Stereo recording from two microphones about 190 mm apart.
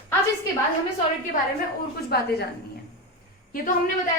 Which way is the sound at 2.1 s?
60° left (ahead or behind).